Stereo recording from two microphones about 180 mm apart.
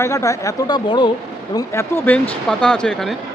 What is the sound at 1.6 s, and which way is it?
Speech, 15° left (ahead or behind).